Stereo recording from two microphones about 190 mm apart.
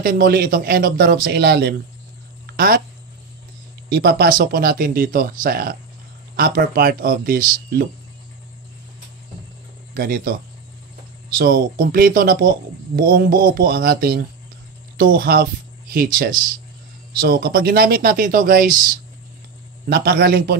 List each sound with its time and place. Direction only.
0.0 s speech: 50° right (ahead or behind)
3.9 s speech: 55° right (ahead or behind)
9.9 s speech: 50° right (ahead or behind)
11.3 s a man's voice: 50° right (ahead or behind)